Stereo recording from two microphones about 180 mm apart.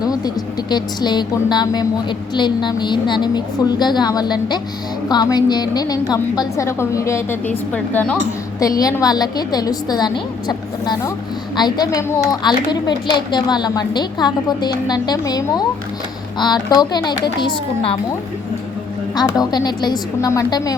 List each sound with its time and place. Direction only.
0.7 s a woman's voice: 25° left (ahead or behind); by 8.2 s 5° left (ahead or behind)
8.5 s a woman's voice: 20° left (ahead or behind)
19.1 s a woman's voice: 20° left (ahead or behind)